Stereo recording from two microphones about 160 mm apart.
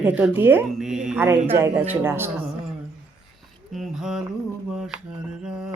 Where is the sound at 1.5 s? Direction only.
15° right (ahead or behind).